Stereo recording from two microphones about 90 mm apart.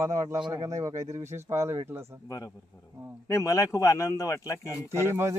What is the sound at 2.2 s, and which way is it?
Speech, 40° left (ahead or behind).